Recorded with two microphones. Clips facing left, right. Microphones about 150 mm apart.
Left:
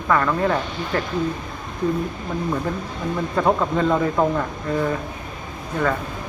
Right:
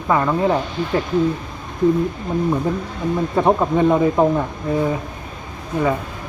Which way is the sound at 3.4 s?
20° right (ahead or behind).